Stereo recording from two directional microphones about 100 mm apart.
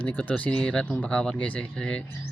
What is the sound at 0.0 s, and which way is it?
Speech, 15° left (ahead or behind).